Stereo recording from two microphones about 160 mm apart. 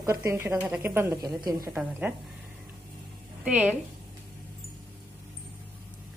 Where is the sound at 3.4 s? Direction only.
5° right (ahead or behind).